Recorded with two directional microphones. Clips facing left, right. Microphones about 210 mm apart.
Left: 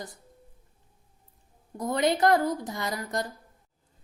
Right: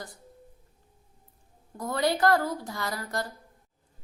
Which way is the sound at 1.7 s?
20° left (ahead or behind).